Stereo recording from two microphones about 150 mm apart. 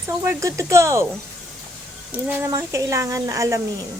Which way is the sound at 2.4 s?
20° right (ahead or behind).